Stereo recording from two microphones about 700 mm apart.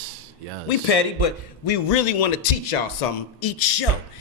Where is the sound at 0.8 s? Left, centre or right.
Left.